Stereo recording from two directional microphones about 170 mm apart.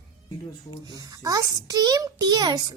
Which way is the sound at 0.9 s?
20° right (ahead or behind).